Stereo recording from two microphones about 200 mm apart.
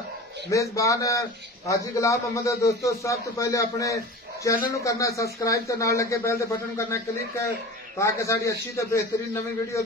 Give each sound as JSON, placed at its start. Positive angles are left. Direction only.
{"t": 0.5, "sound": "a man's voice", "side_deg": 15}